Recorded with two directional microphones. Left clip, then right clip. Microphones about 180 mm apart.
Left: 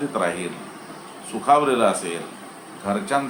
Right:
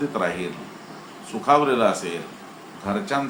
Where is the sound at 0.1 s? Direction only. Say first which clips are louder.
Left 1 dB; 5° left (ahead or behind).